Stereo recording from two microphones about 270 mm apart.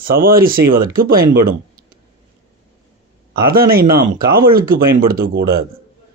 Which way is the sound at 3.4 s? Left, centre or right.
Right.